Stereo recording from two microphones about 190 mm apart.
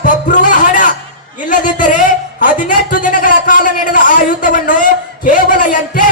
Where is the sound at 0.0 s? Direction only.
45° left (ahead or behind).